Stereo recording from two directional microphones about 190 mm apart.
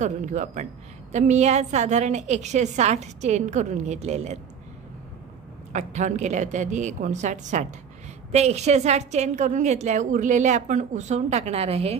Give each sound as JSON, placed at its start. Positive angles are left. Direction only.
{"t": 0.0, "sound": "a woman's voice", "side_deg": -40}
{"t": 5.7, "sound": "a woman's voice", "side_deg": -40}